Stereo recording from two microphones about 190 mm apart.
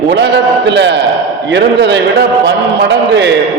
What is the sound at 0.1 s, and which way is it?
A man's voice, 65° right (ahead or behind).